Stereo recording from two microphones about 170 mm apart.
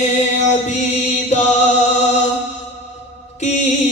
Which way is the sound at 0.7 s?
45° left (ahead or behind).